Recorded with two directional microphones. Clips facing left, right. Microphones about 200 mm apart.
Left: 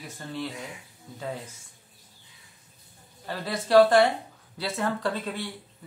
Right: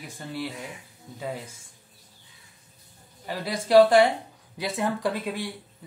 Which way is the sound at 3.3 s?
15° right (ahead or behind).